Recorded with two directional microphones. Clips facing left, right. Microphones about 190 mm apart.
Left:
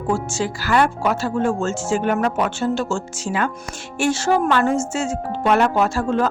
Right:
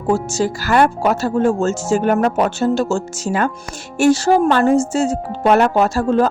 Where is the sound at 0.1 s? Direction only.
40° right (ahead or behind).